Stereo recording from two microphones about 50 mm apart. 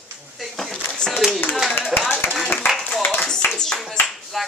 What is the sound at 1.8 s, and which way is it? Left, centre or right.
Speech, centre.